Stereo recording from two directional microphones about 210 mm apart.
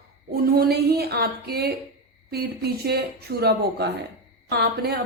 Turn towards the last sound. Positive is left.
turn(degrees=-50)  # may be behind; listen again after turning